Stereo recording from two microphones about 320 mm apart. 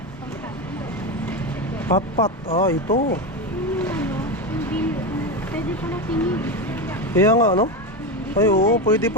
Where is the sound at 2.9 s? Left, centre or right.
Left.